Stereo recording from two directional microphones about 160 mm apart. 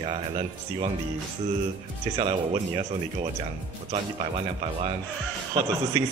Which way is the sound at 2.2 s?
35° right (ahead or behind).